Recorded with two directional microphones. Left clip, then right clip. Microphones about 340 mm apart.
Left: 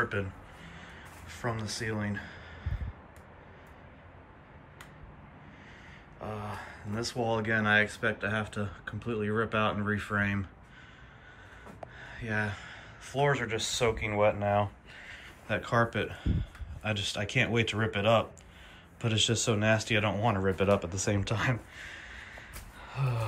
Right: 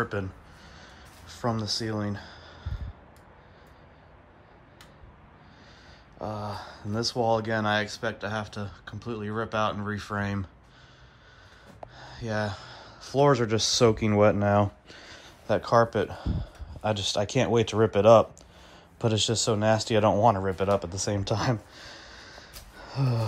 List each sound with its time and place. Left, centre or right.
1.3 s speech: centre
6.2 s speech: centre
12.0 s a sound: centre
13.8 s speech: right
14.9 s speech: centre
22.8 s a sound: right